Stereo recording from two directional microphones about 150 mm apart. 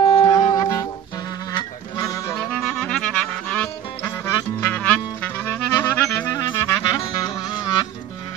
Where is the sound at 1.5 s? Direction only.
25° left (ahead or behind).